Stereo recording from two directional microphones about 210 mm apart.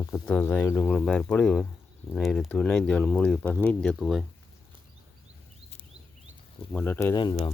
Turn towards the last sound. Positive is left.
turn(degrees=20)  # may be behind; listen again after turning